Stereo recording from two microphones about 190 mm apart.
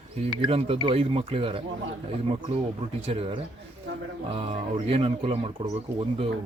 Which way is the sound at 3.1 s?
30° right (ahead or behind).